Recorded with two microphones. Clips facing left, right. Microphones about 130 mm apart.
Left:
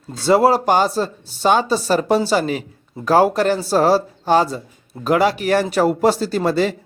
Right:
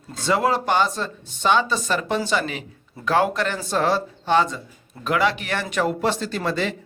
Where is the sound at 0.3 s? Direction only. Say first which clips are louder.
Left 7 dB; 35° left (ahead or behind).